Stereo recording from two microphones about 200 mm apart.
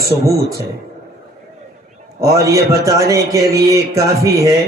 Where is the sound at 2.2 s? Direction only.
15° right (ahead or behind).